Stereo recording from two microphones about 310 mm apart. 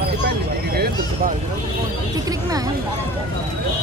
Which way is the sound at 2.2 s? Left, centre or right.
Centre.